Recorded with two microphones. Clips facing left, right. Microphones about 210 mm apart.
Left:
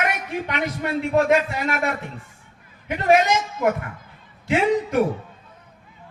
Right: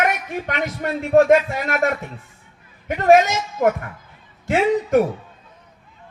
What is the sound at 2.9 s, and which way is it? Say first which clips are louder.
A man's voice: right 4 dB; 45° right (ahead or behind).